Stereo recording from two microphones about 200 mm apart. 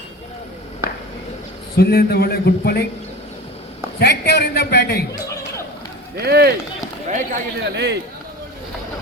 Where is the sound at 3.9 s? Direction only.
55° left (ahead or behind).